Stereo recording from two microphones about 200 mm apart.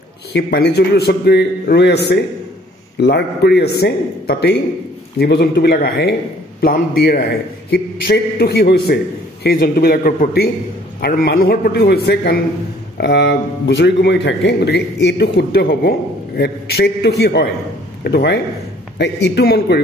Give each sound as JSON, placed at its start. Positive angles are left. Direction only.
{"t": 0.3, "sound": "a man's voice", "side_deg": 55}